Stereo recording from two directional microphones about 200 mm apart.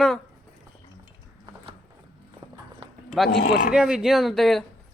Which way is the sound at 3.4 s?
40° left (ahead or behind).